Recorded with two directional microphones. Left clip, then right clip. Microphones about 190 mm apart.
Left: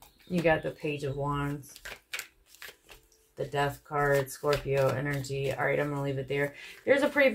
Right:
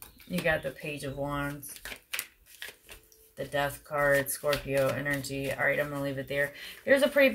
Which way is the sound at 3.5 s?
25° left (ahead or behind).